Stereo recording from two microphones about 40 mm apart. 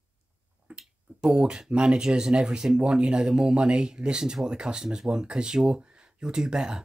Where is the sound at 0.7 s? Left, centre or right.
Right.